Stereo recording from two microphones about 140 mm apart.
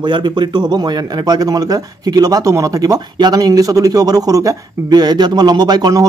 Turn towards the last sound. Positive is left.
turn(degrees=-25)  # may be behind; listen again after turning